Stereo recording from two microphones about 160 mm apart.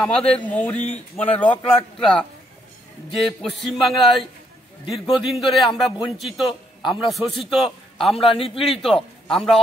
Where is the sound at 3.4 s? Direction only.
Centre (ahead or behind).